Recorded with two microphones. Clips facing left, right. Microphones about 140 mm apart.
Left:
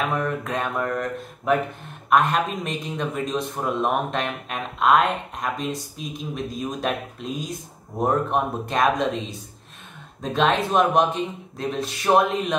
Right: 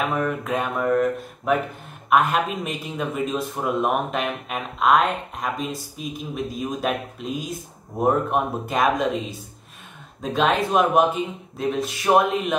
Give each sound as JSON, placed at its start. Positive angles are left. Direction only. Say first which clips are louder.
{"t": 0.1, "sound": "speech", "louder": "right 1 dB", "side_deg": 0}